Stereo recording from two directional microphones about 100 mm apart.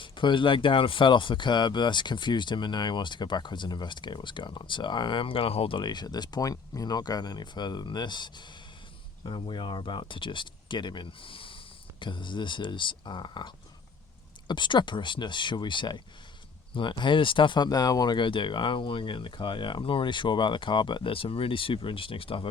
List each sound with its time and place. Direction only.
0.0 s speech: 55° left (ahead or behind)